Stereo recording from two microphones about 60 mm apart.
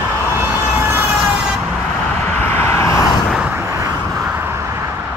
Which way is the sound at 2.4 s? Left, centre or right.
Left.